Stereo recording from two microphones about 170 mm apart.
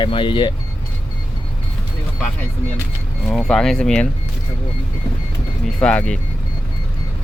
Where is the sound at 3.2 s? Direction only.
Centre (ahead or behind).